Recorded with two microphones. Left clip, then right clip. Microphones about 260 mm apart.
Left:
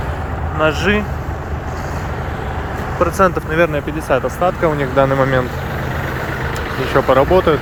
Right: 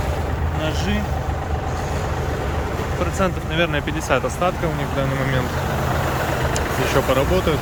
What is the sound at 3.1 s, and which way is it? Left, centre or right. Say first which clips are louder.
Speech: left 7 dB; centre.